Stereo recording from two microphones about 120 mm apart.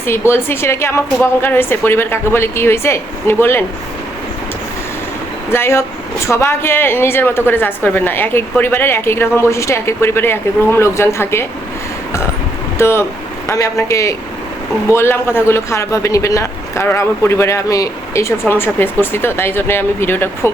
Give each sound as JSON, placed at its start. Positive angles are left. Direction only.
{"t": 0.0, "sound": "speech", "side_deg": 20}
{"t": 5.5, "sound": "speech", "side_deg": 20}
{"t": 12.8, "sound": "speech", "side_deg": 20}